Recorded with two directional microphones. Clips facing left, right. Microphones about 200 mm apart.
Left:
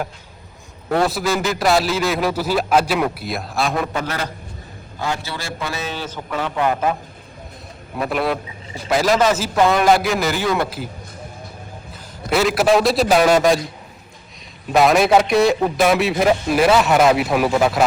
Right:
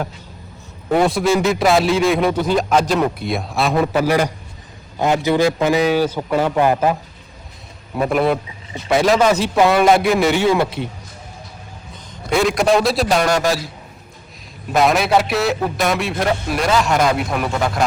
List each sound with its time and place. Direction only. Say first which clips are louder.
1.0 s a man's voice: right 4 dB; centre (ahead or behind)
4.0 s a man's voice: right 9 dB; 15° right (ahead or behind)
7.9 s a man's voice: right 4 dB; centre (ahead or behind)
11.9 s a man's voice: right 1 dB; 5° left (ahead or behind)
14.7 s a man's voice: left 2 dB; centre (ahead or behind)